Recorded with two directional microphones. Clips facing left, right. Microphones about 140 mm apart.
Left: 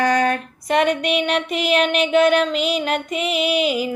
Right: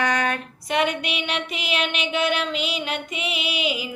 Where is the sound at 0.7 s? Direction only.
45° left (ahead or behind).